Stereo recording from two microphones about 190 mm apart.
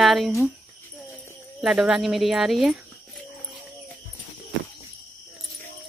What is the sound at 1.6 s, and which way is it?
A woman's voice, 5° right (ahead or behind).